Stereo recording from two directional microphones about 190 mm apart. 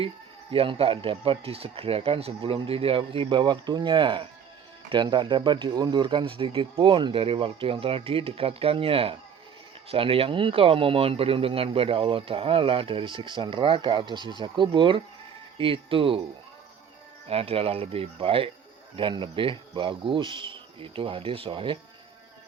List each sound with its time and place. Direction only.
0.5 s speech: 30° right (ahead or behind)
17.2 s speech: 30° right (ahead or behind)